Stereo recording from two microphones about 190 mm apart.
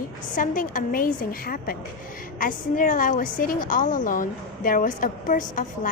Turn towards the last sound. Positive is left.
turn(degrees=45)  # may be behind; listen again after turning